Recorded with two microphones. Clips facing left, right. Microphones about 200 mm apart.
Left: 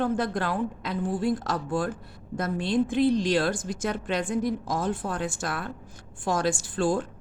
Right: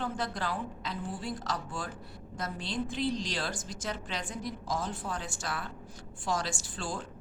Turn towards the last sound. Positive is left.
turn(degrees=55)  # may be behind; listen again after turning